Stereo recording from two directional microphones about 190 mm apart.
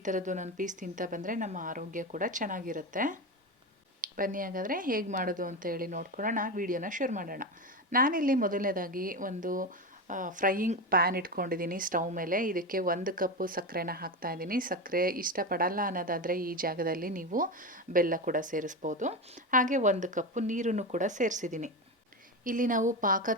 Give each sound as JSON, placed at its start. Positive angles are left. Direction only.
{"t": 0.0, "sound": "a woman's voice", "side_deg": -40}